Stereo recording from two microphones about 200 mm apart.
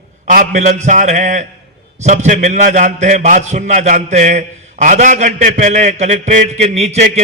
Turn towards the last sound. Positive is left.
turn(degrees=-30)  # may be behind; listen again after turning